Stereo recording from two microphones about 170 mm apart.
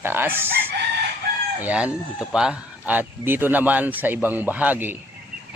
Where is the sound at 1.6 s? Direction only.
5° right (ahead or behind).